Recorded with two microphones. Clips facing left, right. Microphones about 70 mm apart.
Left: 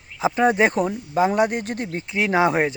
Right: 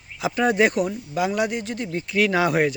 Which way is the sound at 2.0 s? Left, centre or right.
Left.